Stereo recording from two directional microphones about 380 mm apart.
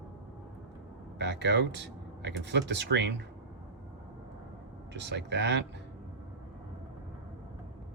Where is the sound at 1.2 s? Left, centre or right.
Right.